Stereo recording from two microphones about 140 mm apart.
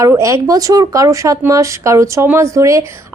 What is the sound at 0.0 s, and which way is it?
Speech, 20° right (ahead or behind).